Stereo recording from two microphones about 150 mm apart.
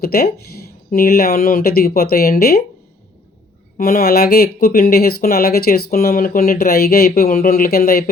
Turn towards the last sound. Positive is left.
turn(degrees=85)